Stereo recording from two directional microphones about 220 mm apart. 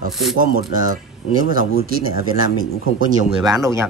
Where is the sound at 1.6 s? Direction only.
40° right (ahead or behind).